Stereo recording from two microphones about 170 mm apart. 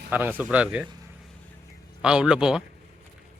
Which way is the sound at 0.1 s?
10° right (ahead or behind).